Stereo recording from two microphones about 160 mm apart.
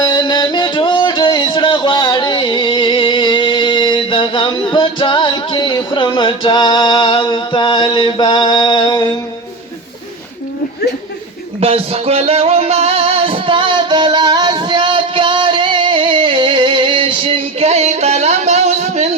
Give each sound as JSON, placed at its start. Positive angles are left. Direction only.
{"t": 0.0, "sound": "music", "side_deg": 25}
{"t": 11.6, "sound": "music", "side_deg": -40}